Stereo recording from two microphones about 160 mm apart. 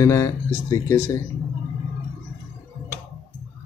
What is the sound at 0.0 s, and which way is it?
A man's voice, 20° left (ahead or behind).